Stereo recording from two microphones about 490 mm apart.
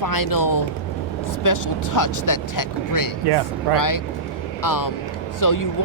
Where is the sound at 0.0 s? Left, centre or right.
Left.